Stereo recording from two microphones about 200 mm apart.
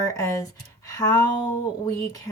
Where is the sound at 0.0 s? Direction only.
15° left (ahead or behind).